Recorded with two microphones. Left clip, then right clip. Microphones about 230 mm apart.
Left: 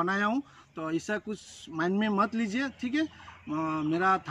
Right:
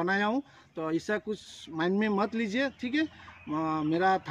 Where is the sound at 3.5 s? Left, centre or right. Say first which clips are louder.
Right 1 dB; centre.